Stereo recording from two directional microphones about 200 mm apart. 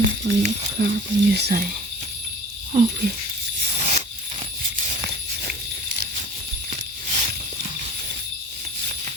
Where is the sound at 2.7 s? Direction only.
40° right (ahead or behind).